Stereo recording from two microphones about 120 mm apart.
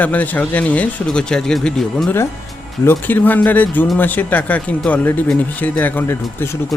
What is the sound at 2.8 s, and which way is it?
Speech, 20° left (ahead or behind).